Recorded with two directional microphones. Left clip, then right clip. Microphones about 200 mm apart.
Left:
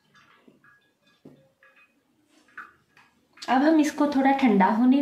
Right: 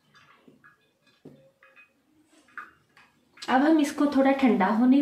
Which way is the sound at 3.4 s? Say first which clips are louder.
Left 1 dB; 35° left (ahead or behind).